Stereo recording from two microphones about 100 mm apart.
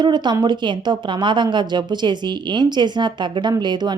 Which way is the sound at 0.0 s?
45° right (ahead or behind).